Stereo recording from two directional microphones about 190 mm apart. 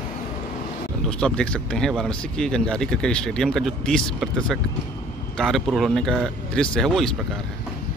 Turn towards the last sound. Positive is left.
turn(degrees=0)  # may be behind; listen again after turning